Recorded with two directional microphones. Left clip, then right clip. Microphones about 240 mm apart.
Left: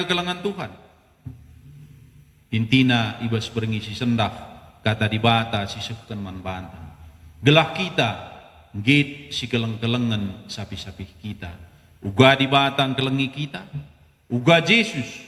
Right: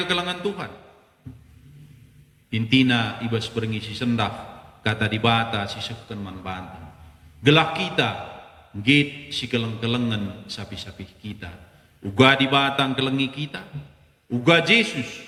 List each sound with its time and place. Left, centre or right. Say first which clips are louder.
0.0 s a man's voice: even; left
2.5 s a man's voice: even; left